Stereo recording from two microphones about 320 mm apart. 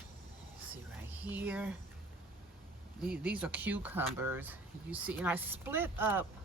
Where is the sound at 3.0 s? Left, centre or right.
Centre.